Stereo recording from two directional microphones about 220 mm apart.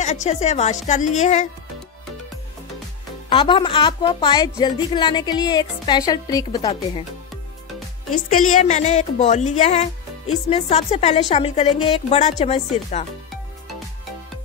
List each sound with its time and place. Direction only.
0.0 s speech: 30° left (ahead or behind)
3.3 s speech: 25° left (ahead or behind)
8.3 s speech: 35° left (ahead or behind)